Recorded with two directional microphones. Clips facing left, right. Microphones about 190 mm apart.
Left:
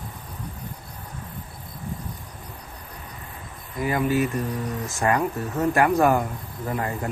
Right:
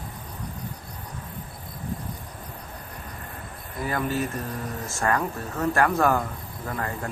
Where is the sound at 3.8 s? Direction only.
15° left (ahead or behind).